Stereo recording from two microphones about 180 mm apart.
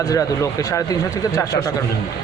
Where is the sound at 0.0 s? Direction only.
20° left (ahead or behind).